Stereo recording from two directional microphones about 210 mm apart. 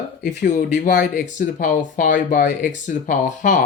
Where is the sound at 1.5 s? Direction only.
40° left (ahead or behind).